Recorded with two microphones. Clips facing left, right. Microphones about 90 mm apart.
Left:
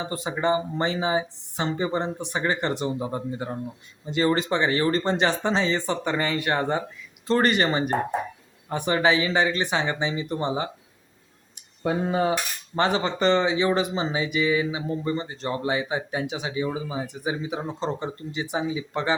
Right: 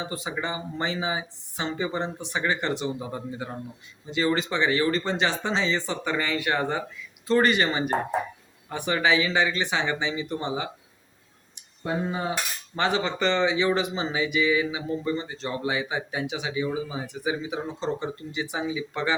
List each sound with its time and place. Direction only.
0.0 s speech: 45° left (ahead or behind)
8.9 s speech: 35° left (ahead or behind)
11.8 s cutlery: 85° left
12.7 s speech: 35° left (ahead or behind)